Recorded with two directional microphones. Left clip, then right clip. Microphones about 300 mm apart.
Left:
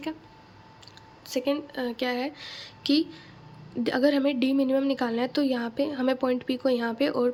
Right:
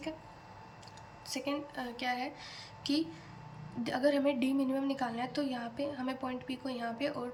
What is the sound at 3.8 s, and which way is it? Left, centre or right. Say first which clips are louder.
A woman's voice: left 6 dB; centre.